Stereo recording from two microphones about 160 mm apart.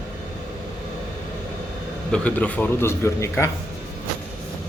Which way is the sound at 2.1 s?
10° left (ahead or behind).